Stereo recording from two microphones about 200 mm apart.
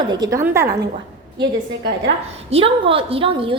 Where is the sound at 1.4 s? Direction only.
60° right (ahead or behind).